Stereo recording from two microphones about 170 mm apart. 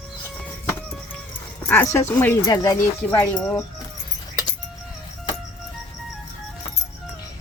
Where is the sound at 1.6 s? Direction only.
15° left (ahead or behind).